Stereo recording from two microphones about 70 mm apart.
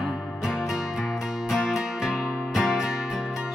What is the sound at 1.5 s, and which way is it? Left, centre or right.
Music, centre.